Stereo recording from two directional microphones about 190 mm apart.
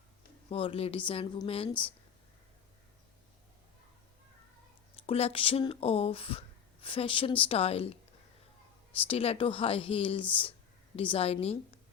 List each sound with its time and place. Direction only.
0.5 s speech: 30° left (ahead or behind)
5.0 s speech: 30° left (ahead or behind)
9.0 s a woman's voice: 30° left (ahead or behind)